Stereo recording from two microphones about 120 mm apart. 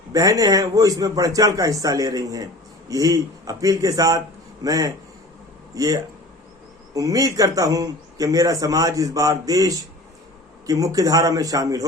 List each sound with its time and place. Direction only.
0.1 s speech: 30° right (ahead or behind)